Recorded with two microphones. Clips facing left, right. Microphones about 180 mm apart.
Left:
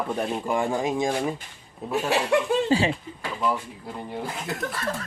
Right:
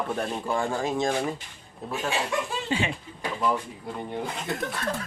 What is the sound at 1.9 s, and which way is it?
Speech, 70° left (ahead or behind).